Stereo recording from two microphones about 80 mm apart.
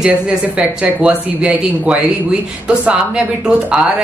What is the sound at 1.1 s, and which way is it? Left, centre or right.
Speech, centre.